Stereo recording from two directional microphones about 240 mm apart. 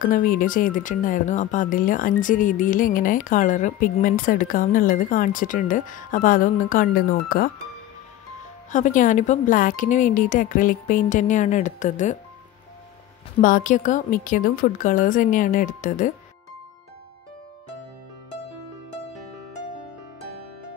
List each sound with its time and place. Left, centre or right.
0.1 s speech: left
8.7 s speech: left
13.4 s speech: left